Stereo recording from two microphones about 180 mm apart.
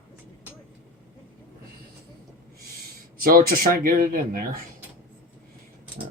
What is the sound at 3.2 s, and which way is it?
Speech, 55° right (ahead or behind).